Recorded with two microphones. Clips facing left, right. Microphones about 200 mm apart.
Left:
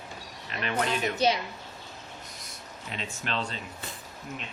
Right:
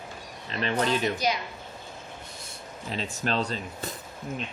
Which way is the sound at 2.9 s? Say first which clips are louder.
Right 5 dB; 35° right (ahead or behind).